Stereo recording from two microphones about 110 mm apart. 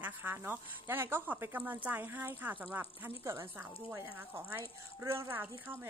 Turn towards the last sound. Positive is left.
turn(degrees=-20)  # may be behind; listen again after turning